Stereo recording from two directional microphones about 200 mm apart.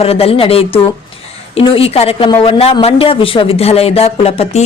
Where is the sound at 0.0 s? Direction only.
30° left (ahead or behind).